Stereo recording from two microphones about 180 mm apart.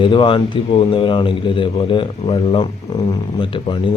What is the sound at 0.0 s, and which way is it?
A man's voice, 25° left (ahead or behind).